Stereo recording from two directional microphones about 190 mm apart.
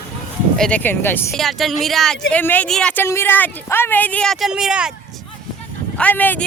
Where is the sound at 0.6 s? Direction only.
5° left (ahead or behind).